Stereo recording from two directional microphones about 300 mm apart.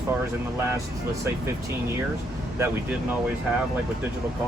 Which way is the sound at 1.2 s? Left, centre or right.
Centre.